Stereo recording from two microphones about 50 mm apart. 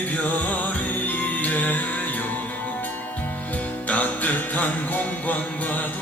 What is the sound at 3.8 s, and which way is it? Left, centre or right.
Music, left.